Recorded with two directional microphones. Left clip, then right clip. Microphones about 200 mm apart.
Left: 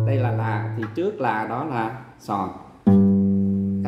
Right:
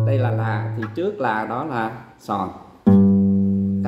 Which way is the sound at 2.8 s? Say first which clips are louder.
Right 2 dB; 40° right (ahead or behind).